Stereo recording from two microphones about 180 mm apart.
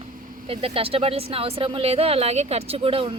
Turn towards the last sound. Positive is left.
turn(degrees=-30)  # may be behind; listen again after turning